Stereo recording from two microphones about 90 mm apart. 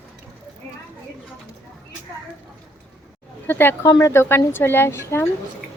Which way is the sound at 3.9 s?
40° left (ahead or behind).